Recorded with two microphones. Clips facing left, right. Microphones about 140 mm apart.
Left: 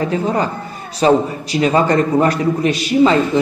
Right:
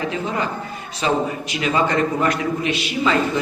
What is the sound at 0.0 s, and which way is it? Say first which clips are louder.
A man's voice: left 6 dB; 40° left (ahead or behind).